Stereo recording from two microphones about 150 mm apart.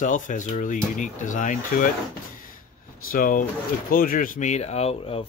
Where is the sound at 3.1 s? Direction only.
70° left (ahead or behind).